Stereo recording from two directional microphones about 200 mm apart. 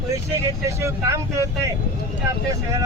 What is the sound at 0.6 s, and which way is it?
Speech, 15° right (ahead or behind).